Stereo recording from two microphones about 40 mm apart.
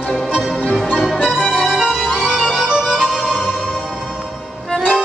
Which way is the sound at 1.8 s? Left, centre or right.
Centre.